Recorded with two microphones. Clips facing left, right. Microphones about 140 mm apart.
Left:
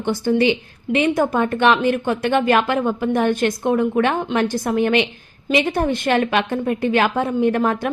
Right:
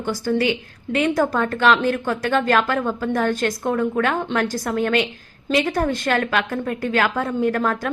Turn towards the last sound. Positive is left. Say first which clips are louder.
# left 3 dB
turn(degrees=20)  # may be behind; listen again after turning